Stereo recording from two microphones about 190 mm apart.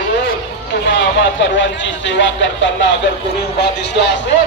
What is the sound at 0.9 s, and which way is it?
Speech, 70° left (ahead or behind).